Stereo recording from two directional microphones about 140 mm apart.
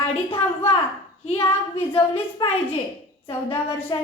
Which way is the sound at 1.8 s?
45° left (ahead or behind).